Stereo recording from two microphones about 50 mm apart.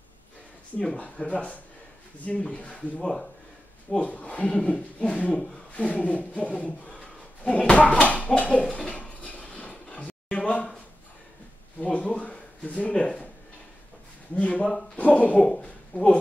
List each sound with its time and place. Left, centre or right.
0.7 s speech: left
3.0 s speech: centre
4.0 s speech: left
5.3 s speech: centre
5.7 s a sound: left
12.2 s speech: left
14.3 s speech: left